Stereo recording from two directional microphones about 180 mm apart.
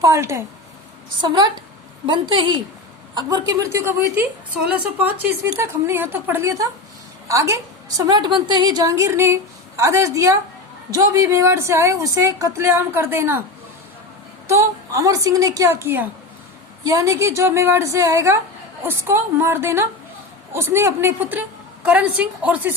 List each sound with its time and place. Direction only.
0.0 s a woman's voice: 15° right (ahead or behind)
1.2 s a woman's voice: 25° right (ahead or behind)
14.4 s a woman's voice: 15° right (ahead or behind)